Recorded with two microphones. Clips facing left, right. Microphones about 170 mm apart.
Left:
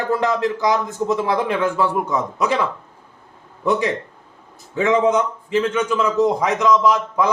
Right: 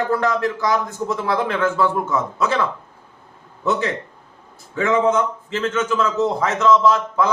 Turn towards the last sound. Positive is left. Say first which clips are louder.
# even
turn(degrees=15)  # may be behind; listen again after turning